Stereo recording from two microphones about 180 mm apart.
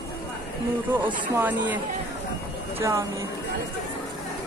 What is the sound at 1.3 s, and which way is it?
Speech, 10° right (ahead or behind).